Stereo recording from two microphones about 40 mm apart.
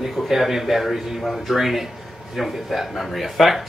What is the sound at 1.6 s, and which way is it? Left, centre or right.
Speech, centre.